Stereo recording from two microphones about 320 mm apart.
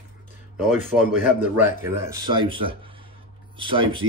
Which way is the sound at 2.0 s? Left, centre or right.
Centre.